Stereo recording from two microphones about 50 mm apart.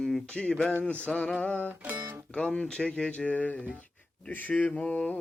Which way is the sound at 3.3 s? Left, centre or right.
Left.